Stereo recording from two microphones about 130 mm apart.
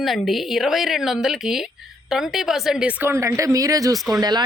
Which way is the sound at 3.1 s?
25° right (ahead or behind).